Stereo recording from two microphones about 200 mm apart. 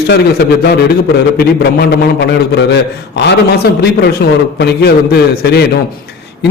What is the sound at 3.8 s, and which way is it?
A man's voice, 55° left (ahead or behind).